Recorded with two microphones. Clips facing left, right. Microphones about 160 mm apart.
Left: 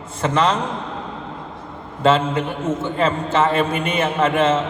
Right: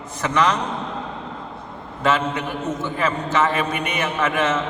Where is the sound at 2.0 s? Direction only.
30° left (ahead or behind).